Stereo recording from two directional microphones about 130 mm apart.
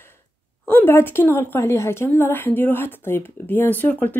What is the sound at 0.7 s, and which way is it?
A woman's voice, 15° left (ahead or behind).